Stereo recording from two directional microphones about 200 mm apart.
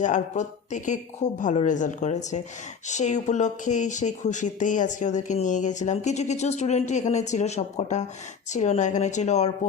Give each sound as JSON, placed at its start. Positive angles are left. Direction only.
{"t": 0.0, "sound": "speech", "side_deg": 40}